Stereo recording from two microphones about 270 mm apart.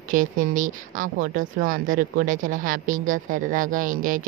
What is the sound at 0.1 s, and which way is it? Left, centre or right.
Speech, right.